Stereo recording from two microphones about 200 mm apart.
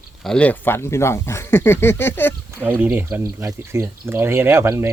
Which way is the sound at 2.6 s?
10° right (ahead or behind).